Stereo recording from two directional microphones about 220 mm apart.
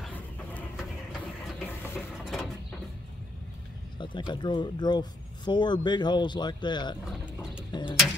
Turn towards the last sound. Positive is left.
turn(degrees=20)  # may be behind; listen again after turning